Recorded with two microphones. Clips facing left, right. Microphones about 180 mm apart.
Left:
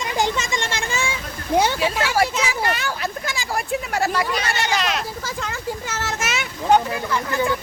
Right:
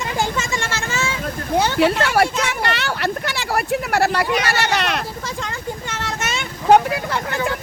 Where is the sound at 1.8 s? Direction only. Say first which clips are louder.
Right 4 dB; 65° right (ahead or behind).